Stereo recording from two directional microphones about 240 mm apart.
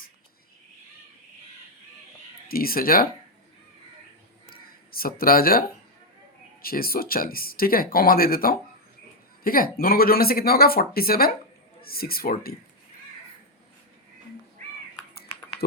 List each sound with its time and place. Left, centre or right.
2.5 s speech: left
4.9 s speech: left